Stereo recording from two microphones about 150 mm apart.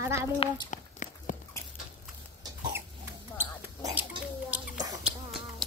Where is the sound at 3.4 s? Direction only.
25° right (ahead or behind).